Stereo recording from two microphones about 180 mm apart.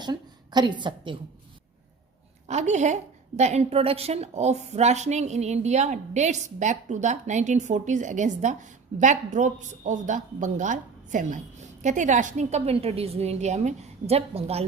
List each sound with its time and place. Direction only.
0.0 s a woman's voice: 25° right (ahead or behind)
2.5 s a woman's voice: 40° right (ahead or behind)